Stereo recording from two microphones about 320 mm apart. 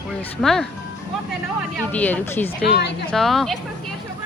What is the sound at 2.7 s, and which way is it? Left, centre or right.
Speech, left.